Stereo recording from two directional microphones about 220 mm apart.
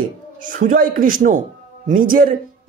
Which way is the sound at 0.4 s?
35° right (ahead or behind).